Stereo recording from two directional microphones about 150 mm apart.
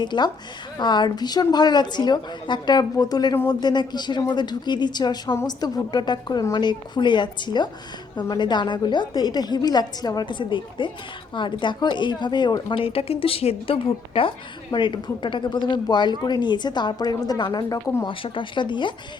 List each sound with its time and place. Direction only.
0.0 s speech: 30° left (ahead or behind)
12.8 s a woman's voice: 40° left (ahead or behind); by 18.1 s 25° left (ahead or behind)
18.1 s a woman's voice: 35° left (ahead or behind)